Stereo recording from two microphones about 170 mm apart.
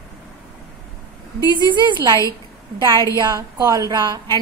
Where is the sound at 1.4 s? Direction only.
25° left (ahead or behind).